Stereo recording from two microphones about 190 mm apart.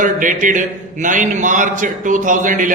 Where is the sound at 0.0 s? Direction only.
45° right (ahead or behind).